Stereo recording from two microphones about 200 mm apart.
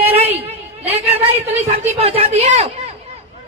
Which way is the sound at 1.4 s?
30° right (ahead or behind).